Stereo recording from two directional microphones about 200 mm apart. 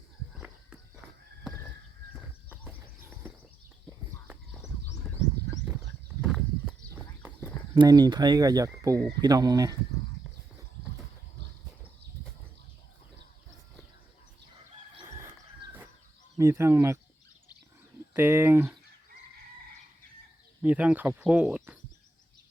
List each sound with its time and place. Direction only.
0.3 s walk: 5° right (ahead or behind)
2.6 s a sound: 10° right (ahead or behind)
6.2 s clip-clop: centre (ahead or behind)
7.8 s speech: 20° right (ahead or behind)
16.4 s speech: 15° right (ahead or behind)
18.1 s speech: 10° right (ahead or behind)
20.6 s speech: 5° right (ahead or behind)